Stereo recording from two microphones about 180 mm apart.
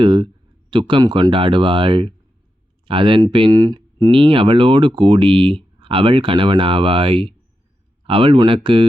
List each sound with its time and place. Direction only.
0.0 s speech: 30° right (ahead or behind)